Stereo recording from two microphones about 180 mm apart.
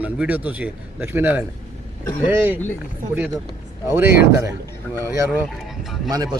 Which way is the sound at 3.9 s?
15° right (ahead or behind).